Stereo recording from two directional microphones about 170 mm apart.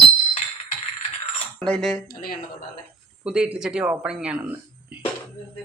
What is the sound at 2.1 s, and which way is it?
Speech, 60° left (ahead or behind).